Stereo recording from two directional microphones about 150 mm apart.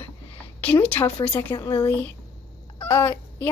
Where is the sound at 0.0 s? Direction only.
10° left (ahead or behind).